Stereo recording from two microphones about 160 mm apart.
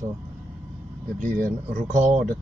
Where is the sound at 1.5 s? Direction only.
45° right (ahead or behind).